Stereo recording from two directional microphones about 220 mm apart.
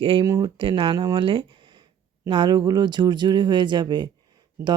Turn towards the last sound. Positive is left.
turn(degrees=-20)  # may be behind; listen again after turning